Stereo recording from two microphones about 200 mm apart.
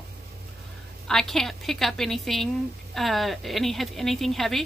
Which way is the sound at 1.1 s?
Centre (ahead or behind).